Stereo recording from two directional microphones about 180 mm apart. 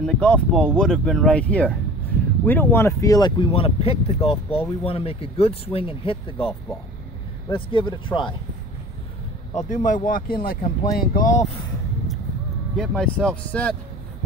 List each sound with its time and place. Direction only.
0.0 s speech: 5° left (ahead or behind); by 8.4 s 25° left (ahead or behind)
9.5 s speech: 40° left (ahead or behind)
12.7 s speech: 5° left (ahead or behind)